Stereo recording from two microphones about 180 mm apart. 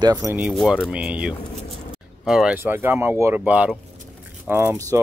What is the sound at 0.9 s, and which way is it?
Speech, 5° right (ahead or behind).